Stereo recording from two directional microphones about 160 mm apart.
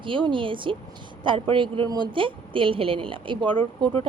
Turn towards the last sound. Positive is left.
turn(degrees=-35)  # may be behind; listen again after turning